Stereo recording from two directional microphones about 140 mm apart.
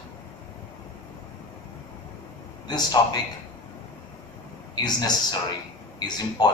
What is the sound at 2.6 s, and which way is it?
Speech, 30° left (ahead or behind).